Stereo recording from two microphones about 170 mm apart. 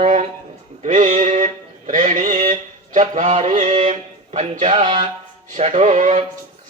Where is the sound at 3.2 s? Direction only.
30° right (ahead or behind).